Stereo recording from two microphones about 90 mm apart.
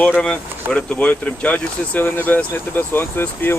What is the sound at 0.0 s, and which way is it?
Speech, 15° left (ahead or behind).